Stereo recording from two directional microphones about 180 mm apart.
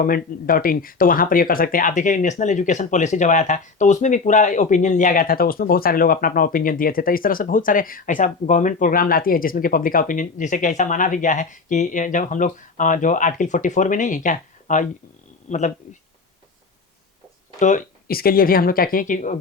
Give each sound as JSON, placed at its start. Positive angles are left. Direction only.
{"t": 0.0, "sound": "speech", "side_deg": 50}
{"t": 17.6, "sound": "speech", "side_deg": 45}